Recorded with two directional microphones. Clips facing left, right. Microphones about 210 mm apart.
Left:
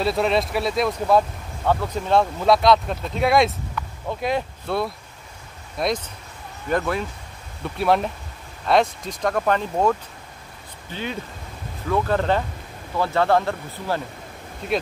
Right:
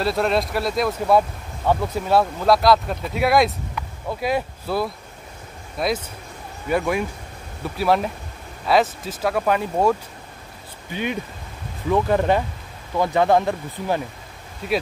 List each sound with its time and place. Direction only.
0.0 s speech: centre (ahead or behind)
7.6 s speech: centre (ahead or behind)